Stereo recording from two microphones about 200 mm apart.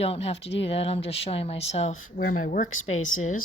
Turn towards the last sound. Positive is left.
turn(degrees=40)  # may be behind; listen again after turning